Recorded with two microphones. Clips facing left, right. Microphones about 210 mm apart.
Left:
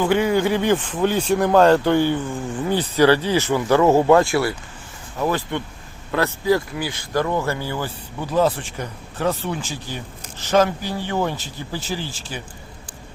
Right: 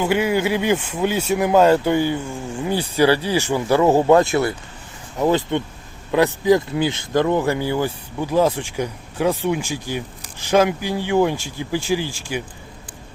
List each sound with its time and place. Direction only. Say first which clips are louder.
0.0 s speech: left 1 dB; 10° right (ahead or behind)